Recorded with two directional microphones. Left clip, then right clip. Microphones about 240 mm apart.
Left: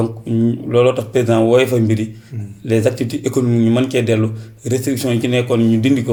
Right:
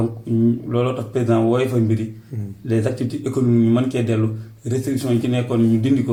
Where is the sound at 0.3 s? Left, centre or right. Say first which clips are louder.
Right 1 dB; left.